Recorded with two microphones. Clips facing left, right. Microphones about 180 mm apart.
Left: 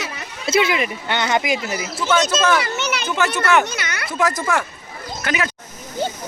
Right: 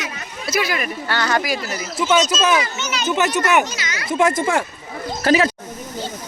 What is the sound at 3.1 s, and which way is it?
Speech, 20° right (ahead or behind).